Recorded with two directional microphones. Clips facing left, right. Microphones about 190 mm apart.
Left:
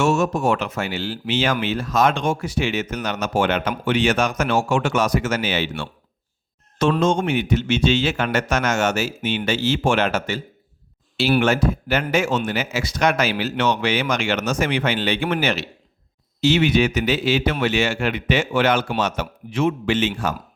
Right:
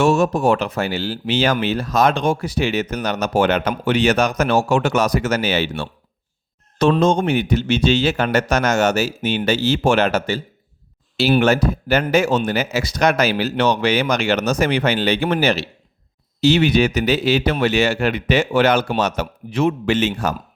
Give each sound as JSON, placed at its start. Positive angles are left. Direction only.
{"t": 0.0, "sound": "speech", "side_deg": -35}
{"t": 7.0, "sound": "speech", "side_deg": -35}